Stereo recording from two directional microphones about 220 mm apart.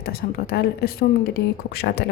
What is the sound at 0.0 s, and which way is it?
Speech, 45° left (ahead or behind).